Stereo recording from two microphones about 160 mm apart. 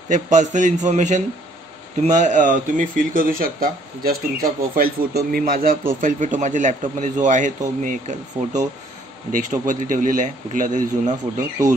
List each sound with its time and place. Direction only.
0.1 s a man's voice: 50° right (ahead or behind)